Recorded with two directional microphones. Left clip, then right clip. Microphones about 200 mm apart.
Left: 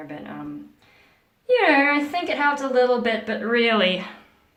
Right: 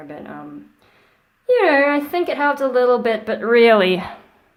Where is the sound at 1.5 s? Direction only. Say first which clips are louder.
Right 3 dB; 50° right (ahead or behind).